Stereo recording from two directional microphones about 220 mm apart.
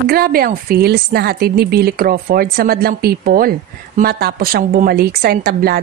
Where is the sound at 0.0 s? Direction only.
45° right (ahead or behind).